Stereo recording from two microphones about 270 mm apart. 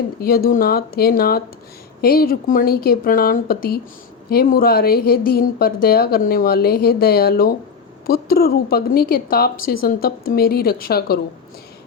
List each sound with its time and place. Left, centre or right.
0.2 s speech: left